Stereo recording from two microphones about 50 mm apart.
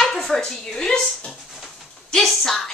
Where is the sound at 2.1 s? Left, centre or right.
Centre.